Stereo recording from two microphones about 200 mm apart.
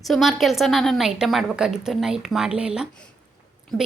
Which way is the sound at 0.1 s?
Centre (ahead or behind).